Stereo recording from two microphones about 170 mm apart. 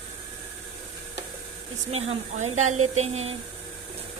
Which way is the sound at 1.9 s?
35° right (ahead or behind).